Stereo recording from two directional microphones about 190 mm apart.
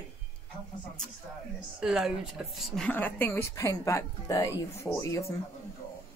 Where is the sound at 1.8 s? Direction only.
Centre (ahead or behind); by 5.3 s 15° left (ahead or behind).